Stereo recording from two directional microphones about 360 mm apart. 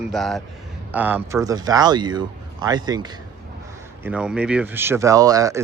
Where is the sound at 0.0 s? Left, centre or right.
Centre.